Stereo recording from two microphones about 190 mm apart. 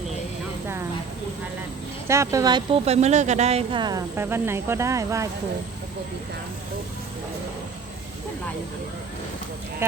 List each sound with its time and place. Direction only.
2.0 s speech: 15° right (ahead or behind)